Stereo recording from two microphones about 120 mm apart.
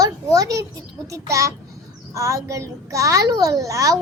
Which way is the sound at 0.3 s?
30° right (ahead or behind).